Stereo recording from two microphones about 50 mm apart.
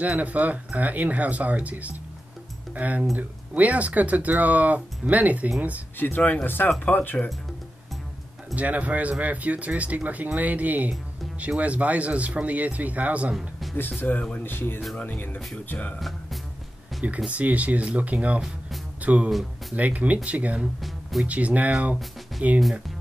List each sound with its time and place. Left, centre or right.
0.0 s speech: right
5.9 s speech: left
8.5 s speech: right
13.4 s a sound: centre
14.1 s speech: centre
14.4 s speech: left
15.0 s speech: left
16.0 s music: centre
17.3 s speech: right
22.6 s speech: centre